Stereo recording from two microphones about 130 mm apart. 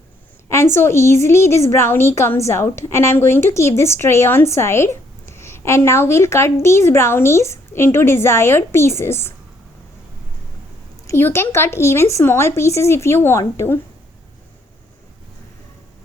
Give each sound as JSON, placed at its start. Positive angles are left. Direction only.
{"t": 0.4, "sound": "a woman's voice", "side_deg": 20}
{"t": 11.0, "sound": "a woman's voice", "side_deg": 20}